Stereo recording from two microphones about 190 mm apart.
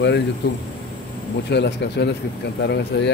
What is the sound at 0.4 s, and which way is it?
Speech, 60° left (ahead or behind).